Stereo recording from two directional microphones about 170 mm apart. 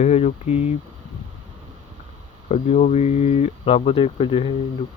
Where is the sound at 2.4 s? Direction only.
45° left (ahead or behind).